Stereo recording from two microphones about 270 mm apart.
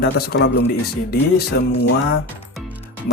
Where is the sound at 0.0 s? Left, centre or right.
Left.